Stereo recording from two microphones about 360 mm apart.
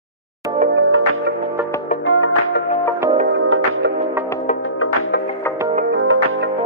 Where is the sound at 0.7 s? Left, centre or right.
Right.